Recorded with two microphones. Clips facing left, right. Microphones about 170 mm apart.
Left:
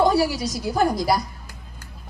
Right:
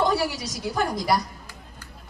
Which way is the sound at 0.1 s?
35° left (ahead or behind).